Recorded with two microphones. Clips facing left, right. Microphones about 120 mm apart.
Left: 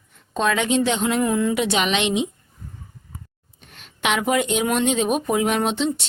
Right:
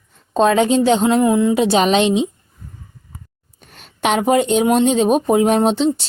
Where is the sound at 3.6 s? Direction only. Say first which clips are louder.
Right 5 dB; 40° right (ahead or behind).